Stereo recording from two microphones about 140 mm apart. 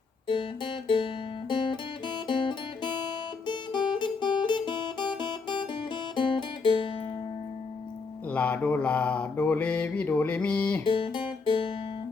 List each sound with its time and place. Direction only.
0.3 s music: 35° left (ahead or behind)
3.4 s guitar: 35° left (ahead or behind)
8.3 s mantra: 10° left (ahead or behind)
10.8 s guitar: 35° left (ahead or behind)